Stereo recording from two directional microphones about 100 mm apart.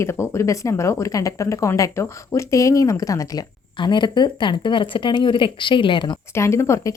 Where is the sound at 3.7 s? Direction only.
50° left (ahead or behind).